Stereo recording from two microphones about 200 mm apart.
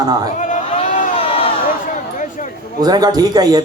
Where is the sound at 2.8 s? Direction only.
20° right (ahead or behind).